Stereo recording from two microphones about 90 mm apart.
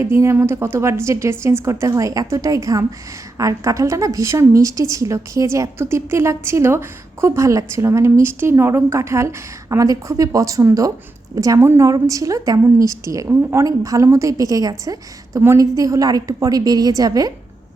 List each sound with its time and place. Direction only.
0.0 s a woman's voice: 30° right (ahead or behind)